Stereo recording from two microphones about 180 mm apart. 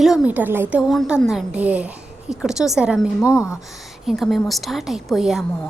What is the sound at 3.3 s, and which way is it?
Speech, 15° left (ahead or behind).